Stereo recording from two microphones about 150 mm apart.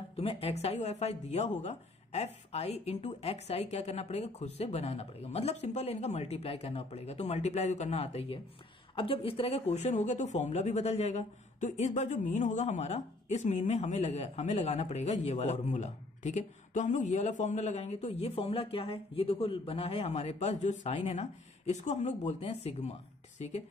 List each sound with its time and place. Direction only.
0.1 s speech: 40° left (ahead or behind)